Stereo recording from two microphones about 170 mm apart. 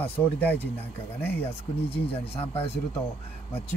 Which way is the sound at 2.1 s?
35° left (ahead or behind).